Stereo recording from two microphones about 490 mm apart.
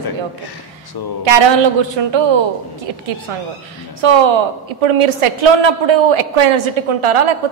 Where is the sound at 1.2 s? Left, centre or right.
Right.